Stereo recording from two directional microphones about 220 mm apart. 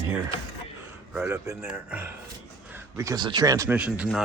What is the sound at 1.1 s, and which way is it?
Speech, 10° right (ahead or behind).